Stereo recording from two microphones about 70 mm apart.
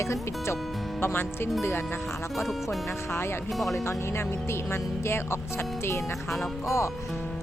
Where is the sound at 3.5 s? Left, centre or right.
Centre.